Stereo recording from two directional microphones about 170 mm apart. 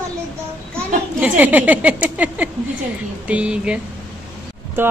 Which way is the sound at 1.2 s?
10° right (ahead or behind).